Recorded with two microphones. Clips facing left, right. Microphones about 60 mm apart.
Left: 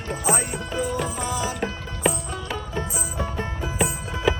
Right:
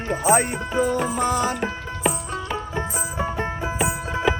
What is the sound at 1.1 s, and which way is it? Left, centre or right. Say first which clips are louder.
Music: right 5 dB; right.